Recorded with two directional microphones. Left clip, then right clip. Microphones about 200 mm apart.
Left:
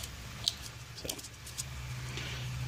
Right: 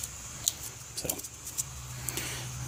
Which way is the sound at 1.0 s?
60° right (ahead or behind).